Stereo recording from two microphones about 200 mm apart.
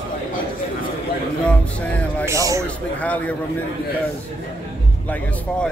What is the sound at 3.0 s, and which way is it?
Speech, 5° left (ahead or behind).